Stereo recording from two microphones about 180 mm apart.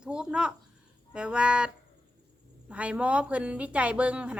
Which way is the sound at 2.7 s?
5° right (ahead or behind).